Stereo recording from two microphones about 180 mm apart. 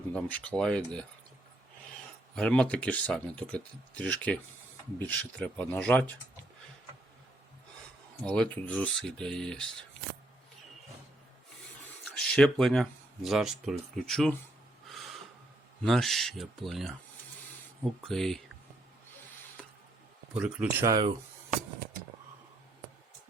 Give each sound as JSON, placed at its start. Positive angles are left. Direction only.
{"t": 0.1, "sound": "speech", "side_deg": 5}
{"t": 2.3, "sound": "speech", "side_deg": 5}
{"t": 8.3, "sound": "speech", "side_deg": 5}
{"t": 12.0, "sound": "speech", "side_deg": 5}
{"t": 14.8, "sound": "snort", "side_deg": 0}
{"t": 15.8, "sound": "speech", "side_deg": 0}
{"t": 20.3, "sound": "speech", "side_deg": -5}
{"t": 20.9, "sound": "speech", "side_deg": -25}